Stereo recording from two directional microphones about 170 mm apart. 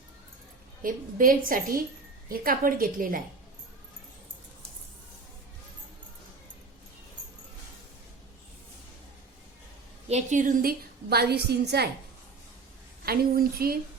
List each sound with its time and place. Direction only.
0.8 s a woman's voice: 55° right (ahead or behind)
10.1 s a woman's voice: 45° right (ahead or behind); by 11.9 s 75° right (ahead or behind)
13.1 s a woman's voice: 60° right (ahead or behind)